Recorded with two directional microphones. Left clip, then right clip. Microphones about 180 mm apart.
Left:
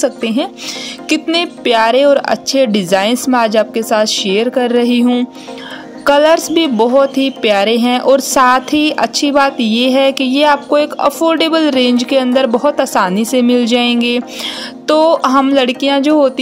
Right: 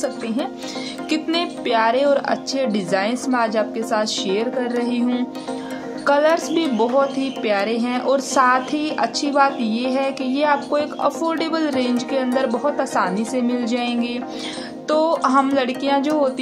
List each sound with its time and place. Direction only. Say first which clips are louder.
0.0 s a woman's voice: left 9 dB; 45° left (ahead or behind)